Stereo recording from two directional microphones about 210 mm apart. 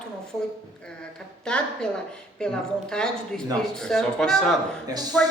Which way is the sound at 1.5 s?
5° left (ahead or behind).